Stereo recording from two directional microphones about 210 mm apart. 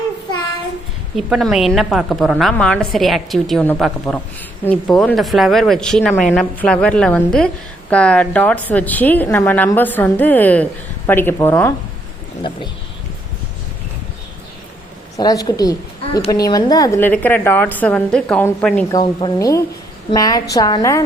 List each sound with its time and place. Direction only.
1.1 s a woman's voice: centre (ahead or behind)
15.1 s a woman's voice: 15° left (ahead or behind)
18.9 s a woman's voice: 20° left (ahead or behind)